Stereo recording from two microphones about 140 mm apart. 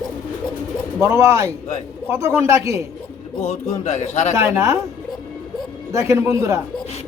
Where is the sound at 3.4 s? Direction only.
55° left (ahead or behind).